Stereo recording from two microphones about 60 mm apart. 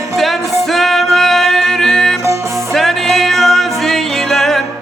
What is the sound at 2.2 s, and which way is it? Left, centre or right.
Music, right.